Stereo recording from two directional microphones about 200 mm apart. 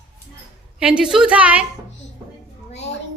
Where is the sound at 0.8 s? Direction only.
5° right (ahead or behind).